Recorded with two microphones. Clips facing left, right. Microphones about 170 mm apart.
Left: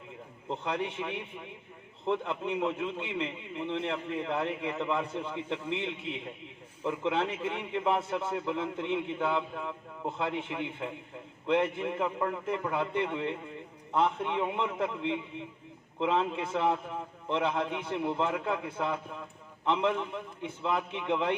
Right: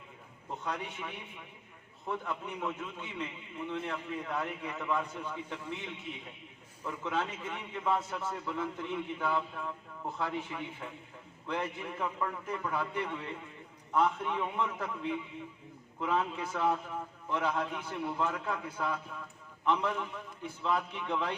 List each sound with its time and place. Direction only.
0.4 s a man's voice: 25° left (ahead or behind)
6.1 s a man's voice: 80° left
6.8 s a man's voice: 25° left (ahead or behind)